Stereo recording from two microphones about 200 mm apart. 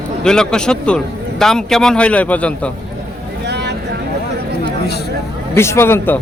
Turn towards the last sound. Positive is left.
turn(degrees=10)  # may be behind; listen again after turning